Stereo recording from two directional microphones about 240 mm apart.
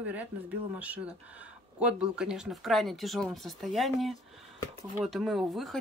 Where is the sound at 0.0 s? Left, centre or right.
Centre.